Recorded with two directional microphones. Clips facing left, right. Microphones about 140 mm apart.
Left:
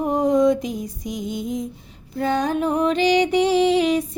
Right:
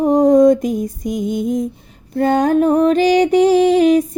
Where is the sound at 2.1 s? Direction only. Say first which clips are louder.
Right 7 dB; 50° right (ahead or behind).